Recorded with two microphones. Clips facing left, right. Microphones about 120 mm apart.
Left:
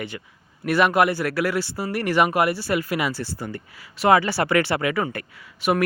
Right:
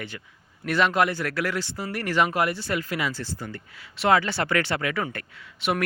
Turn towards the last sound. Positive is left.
turn(degrees=10)  # may be behind; listen again after turning